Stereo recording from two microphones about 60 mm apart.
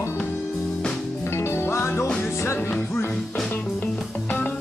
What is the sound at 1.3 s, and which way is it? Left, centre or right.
Music, left.